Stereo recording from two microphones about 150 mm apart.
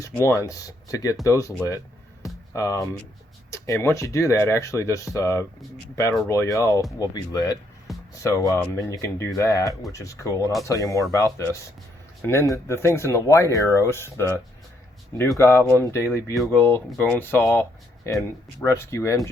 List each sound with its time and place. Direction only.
0.0 s speech: 20° left (ahead or behind)